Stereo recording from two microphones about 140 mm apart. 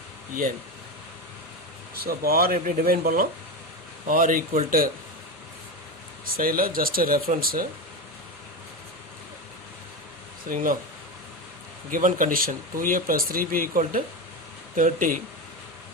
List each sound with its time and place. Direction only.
2.0 s speech: 90° right
4.0 s speech: 75° right (ahead or behind)
6.3 s speech: 90° right
10.5 s speech: 90° right
11.9 s speech: 75° right (ahead or behind)
14.8 s speech: 70° right (ahead or behind)